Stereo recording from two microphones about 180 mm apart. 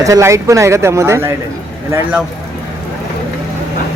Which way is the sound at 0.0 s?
15° right (ahead or behind).